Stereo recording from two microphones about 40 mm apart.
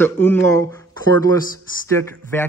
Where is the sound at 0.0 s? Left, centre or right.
Left.